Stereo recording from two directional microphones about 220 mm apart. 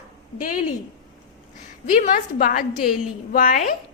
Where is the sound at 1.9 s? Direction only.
35° left (ahead or behind).